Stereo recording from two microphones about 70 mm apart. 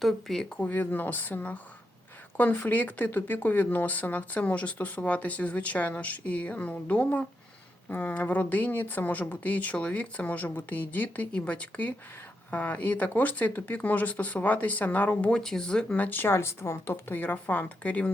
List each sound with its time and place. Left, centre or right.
0.0 s speech: centre
0.5 s speech: left
16.0 s speech: left